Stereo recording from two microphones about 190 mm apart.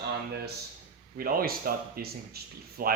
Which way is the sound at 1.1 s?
50° right (ahead or behind).